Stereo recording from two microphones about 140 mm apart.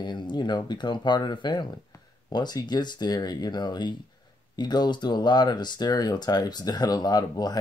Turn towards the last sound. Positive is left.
turn(degrees=30)  # may be behind; listen again after turning